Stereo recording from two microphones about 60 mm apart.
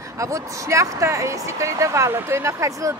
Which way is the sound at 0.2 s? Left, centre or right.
Right.